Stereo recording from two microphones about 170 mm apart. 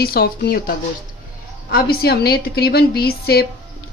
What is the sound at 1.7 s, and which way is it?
A woman's voice, 70° left (ahead or behind).